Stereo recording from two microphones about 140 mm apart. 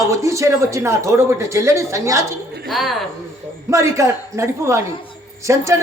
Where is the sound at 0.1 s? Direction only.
20° right (ahead or behind).